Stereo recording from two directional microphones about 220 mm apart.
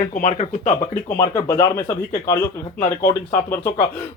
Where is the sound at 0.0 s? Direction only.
35° left (ahead or behind).